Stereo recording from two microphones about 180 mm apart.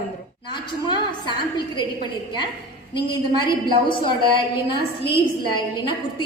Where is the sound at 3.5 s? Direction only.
25° left (ahead or behind).